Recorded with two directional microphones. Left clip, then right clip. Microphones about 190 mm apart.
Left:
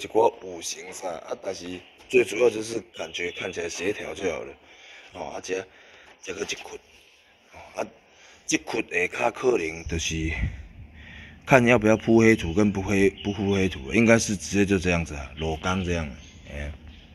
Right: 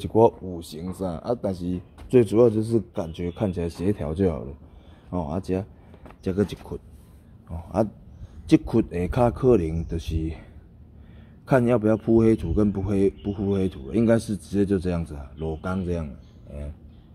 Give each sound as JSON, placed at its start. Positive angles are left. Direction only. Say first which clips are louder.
{"t": 0.0, "sound": "speech", "louder": "right 2 dB", "side_deg": -15}
{"t": 1.0, "sound": "speech", "louder": "right 5 dB", "side_deg": 10}
{"t": 1.5, "sound": "speech", "louder": "right 2 dB", "side_deg": -10}
{"t": 8.5, "sound": "speech", "louder": "right 5 dB", "side_deg": -10}
{"t": 11.4, "sound": "speech", "louder": "left 3 dB", "side_deg": -10}